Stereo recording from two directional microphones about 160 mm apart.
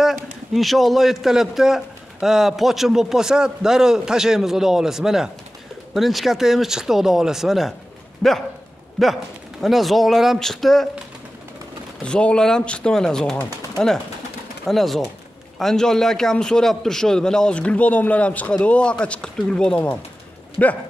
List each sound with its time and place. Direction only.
0.0 s a man's voice: centre (ahead or behind)
12.0 s a man's voice: 5° left (ahead or behind)